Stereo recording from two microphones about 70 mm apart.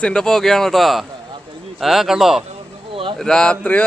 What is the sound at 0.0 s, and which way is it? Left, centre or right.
Speech, centre.